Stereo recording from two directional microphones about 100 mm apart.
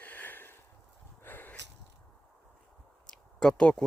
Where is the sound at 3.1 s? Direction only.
10° left (ahead or behind).